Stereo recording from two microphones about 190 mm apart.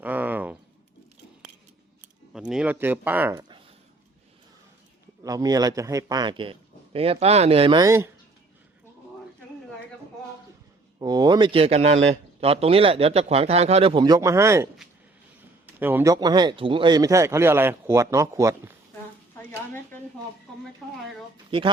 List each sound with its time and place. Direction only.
0.0 s a sound: 10° right (ahead or behind)
2.3 s speech: 5° right (ahead or behind)
5.2 s a man's voice: 20° right (ahead or behind)
11.0 s a man's voice: 20° right (ahead or behind)
16.1 s speech: 20° right (ahead or behind)
19.5 s speech: 10° left (ahead or behind)